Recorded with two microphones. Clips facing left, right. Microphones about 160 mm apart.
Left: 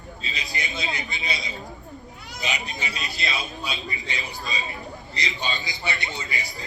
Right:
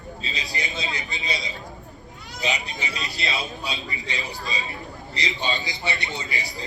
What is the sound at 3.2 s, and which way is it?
Speech, 20° right (ahead or behind).